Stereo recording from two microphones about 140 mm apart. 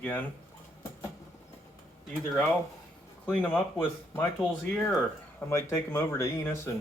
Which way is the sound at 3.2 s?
10° left (ahead or behind).